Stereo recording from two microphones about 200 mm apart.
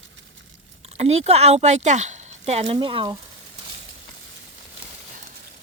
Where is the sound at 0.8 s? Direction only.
30° right (ahead or behind).